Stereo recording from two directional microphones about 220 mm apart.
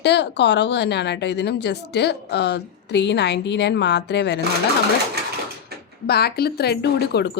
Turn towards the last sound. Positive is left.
turn(degrees=50)  # may be behind; listen again after turning